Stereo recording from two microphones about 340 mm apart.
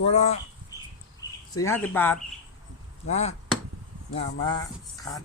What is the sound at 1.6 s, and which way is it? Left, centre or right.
Speech, centre.